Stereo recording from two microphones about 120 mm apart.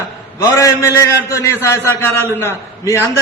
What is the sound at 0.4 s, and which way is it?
A man's voice, 25° left (ahead or behind).